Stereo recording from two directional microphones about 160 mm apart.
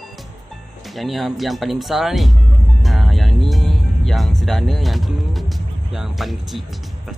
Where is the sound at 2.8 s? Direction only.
Centre (ahead or behind).